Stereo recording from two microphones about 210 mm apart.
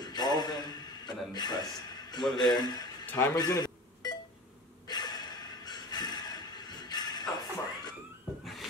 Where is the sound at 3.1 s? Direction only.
15° left (ahead or behind).